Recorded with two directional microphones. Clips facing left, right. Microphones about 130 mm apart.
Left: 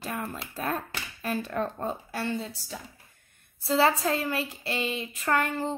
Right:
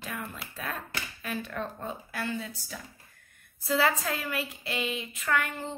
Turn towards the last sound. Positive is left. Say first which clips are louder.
# left 4 dB
turn(degrees=35)  # may be behind; listen again after turning